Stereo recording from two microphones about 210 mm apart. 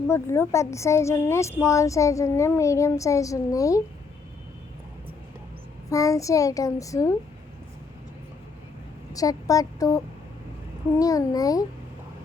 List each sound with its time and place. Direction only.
0.1 s speech: 10° left (ahead or behind)
5.9 s speech: 15° left (ahead or behind)
9.1 s speech: 15° left (ahead or behind)